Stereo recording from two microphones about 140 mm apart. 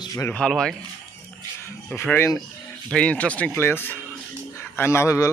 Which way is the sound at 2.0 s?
15° left (ahead or behind).